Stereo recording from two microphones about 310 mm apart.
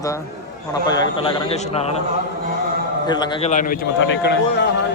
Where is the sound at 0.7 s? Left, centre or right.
Centre.